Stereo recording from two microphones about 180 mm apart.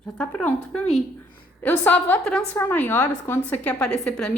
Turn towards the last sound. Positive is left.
turn(degrees=5)  # may be behind; listen again after turning